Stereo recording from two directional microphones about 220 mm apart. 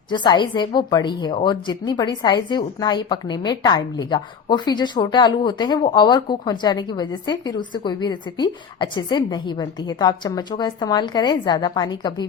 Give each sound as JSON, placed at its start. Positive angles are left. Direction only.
{"t": 0.1, "sound": "a woman's voice", "side_deg": 20}